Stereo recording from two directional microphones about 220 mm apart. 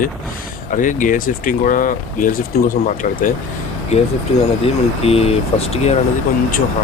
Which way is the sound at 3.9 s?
30° left (ahead or behind).